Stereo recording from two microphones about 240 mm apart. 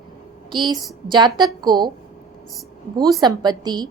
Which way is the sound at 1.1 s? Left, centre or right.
Centre.